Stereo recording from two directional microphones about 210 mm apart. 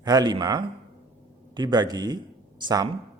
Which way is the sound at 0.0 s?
20° right (ahead or behind).